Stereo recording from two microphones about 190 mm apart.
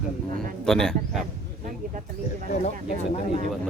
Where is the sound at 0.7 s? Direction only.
Centre (ahead or behind).